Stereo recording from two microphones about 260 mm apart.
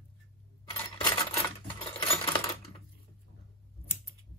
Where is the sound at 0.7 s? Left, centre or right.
Centre.